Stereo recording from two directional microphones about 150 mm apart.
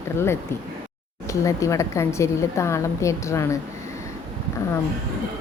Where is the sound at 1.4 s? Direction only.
20° left (ahead or behind).